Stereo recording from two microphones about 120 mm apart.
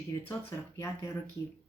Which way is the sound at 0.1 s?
35° left (ahead or behind).